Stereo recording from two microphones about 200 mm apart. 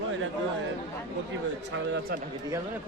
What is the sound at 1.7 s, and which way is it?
Speech, 60° right (ahead or behind).